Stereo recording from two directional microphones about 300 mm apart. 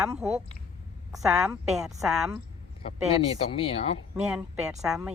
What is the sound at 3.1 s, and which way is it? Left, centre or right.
Speech, centre.